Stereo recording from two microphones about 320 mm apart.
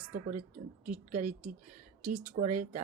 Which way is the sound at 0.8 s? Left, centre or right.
Right.